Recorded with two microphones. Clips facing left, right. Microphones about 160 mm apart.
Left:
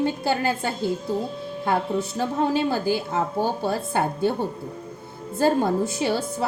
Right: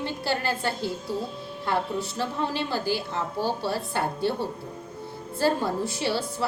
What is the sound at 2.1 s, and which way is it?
A woman's voice, 45° left (ahead or behind).